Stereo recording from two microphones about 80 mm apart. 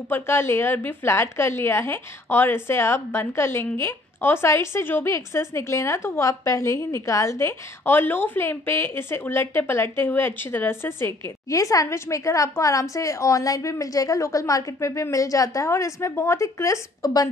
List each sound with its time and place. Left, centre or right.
0.1 s a woman's voice: left
11.4 s a woman's voice: left